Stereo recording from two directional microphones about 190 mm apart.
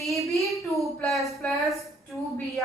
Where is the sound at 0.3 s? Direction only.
Centre (ahead or behind).